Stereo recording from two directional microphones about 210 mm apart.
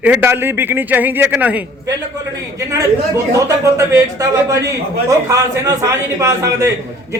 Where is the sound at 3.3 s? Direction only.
15° right (ahead or behind).